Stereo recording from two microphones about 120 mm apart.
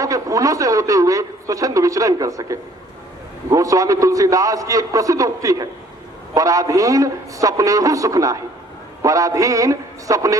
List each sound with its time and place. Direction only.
0.0 s a man's voice: 30° right (ahead or behind)